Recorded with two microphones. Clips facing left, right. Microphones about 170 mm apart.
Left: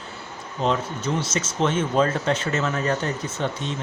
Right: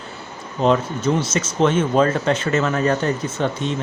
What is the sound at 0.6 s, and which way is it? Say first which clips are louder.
Speech: right 6 dB; 60° right (ahead or behind).